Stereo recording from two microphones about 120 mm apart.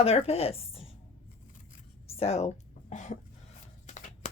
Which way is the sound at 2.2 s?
65° left (ahead or behind).